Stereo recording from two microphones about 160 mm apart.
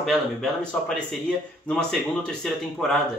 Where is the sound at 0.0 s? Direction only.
Centre (ahead or behind).